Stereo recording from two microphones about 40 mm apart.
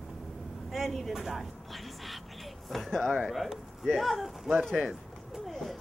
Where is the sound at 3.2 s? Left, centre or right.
Centre.